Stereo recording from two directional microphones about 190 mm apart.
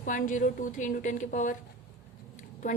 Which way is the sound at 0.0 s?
45° left (ahead or behind).